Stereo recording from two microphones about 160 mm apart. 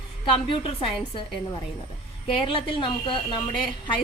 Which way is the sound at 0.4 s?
35° left (ahead or behind).